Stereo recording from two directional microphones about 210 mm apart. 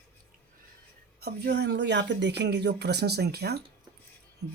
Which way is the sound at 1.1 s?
50° right (ahead or behind).